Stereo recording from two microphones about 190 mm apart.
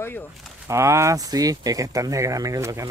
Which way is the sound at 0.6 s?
15° right (ahead or behind).